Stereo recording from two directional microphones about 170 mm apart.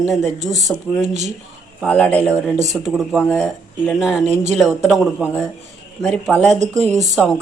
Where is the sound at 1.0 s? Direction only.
40° right (ahead or behind).